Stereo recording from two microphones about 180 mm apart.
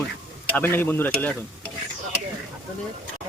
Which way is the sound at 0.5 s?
10° left (ahead or behind).